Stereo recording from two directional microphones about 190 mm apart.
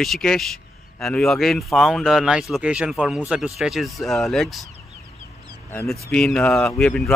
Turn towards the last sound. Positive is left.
turn(degrees=5)  # may be behind; listen again after turning